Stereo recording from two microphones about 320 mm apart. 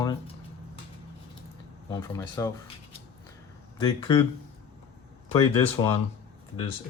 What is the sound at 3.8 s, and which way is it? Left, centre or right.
Speech, centre.